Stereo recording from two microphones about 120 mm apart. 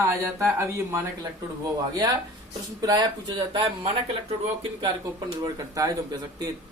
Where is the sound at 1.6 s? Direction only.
35° right (ahead or behind).